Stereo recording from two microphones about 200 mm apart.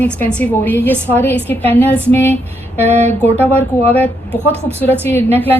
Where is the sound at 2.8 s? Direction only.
35° right (ahead or behind).